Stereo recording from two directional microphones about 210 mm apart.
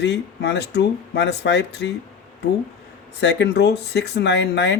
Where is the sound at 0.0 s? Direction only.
55° left (ahead or behind).